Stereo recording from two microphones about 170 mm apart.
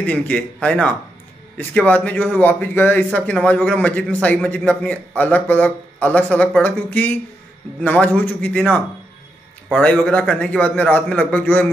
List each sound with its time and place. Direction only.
0.0 s speech: 10° left (ahead or behind)